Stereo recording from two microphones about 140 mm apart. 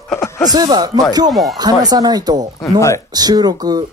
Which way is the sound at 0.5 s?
30° right (ahead or behind).